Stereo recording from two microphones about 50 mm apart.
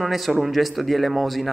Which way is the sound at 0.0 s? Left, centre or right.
Centre.